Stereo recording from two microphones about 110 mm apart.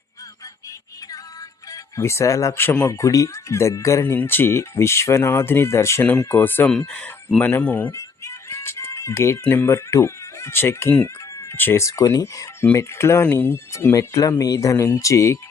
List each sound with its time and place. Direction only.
1.7 s speech: 25° left (ahead or behind)
6.7 s speech: 5° left (ahead or behind)
7.9 s music: 25° left (ahead or behind)
9.4 s speech: 20° left (ahead or behind)